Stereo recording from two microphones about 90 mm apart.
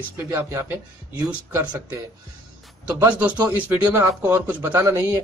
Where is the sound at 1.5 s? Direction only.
25° right (ahead or behind).